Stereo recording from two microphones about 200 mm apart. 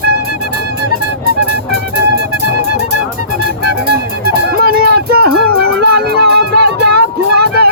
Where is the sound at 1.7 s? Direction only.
55° right (ahead or behind).